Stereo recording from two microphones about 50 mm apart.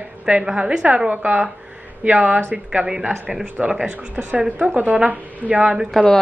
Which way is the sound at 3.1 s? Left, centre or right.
Right.